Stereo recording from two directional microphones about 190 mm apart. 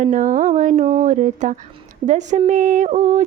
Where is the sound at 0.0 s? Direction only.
40° right (ahead or behind).